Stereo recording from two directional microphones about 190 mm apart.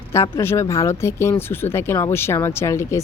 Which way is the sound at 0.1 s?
15° left (ahead or behind).